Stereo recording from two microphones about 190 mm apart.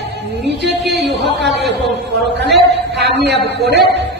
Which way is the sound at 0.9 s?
Centre (ahead or behind).